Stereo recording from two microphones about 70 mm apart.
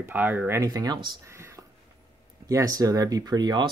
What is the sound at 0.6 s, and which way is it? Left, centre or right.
Speech, right.